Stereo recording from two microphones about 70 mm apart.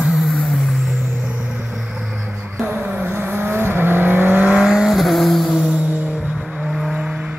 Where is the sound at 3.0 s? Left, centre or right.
Right.